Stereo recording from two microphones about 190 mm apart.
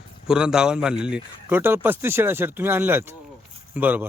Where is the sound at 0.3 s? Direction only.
5° right (ahead or behind).